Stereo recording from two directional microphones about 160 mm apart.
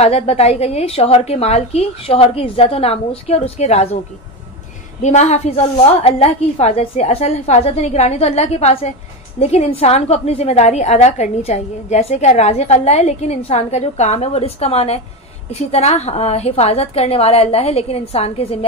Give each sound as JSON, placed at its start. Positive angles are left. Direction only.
{"t": 0.0, "sound": "a woman's voice", "side_deg": 40}
{"t": 5.0, "sound": "a woman's voice", "side_deg": 45}